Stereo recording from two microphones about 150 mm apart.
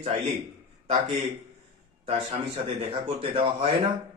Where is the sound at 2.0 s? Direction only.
45° right (ahead or behind).